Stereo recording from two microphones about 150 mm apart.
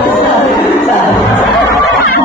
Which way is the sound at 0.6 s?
Centre (ahead or behind).